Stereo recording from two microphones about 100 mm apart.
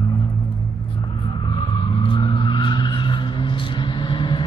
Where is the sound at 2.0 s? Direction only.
55° left (ahead or behind).